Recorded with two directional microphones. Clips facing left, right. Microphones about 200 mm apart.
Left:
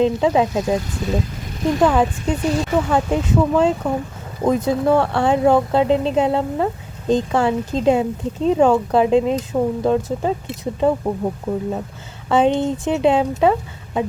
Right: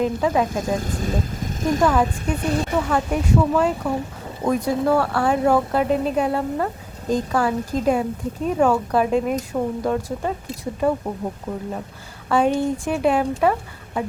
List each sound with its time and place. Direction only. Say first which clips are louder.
0.0 s speech: left 4 dB; 25° left (ahead or behind)
0.6 s speech: left 3 dB; 45° right (ahead or behind)
1.8 s speech: left 4 dB; 20° left (ahead or behind)
12.3 s speech: left 3 dB; 20° left (ahead or behind)